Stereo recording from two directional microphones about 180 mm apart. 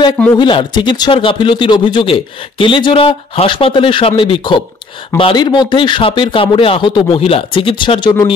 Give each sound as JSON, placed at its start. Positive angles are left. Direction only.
{"t": 0.4, "sound": "speech", "side_deg": 25}